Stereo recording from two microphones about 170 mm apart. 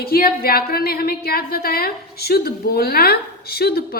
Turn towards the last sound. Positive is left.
turn(degrees=65)  # may be behind; listen again after turning